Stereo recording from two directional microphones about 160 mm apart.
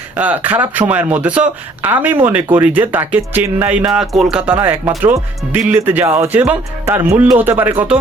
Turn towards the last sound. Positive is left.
turn(degrees=-10)  # may be behind; listen again after turning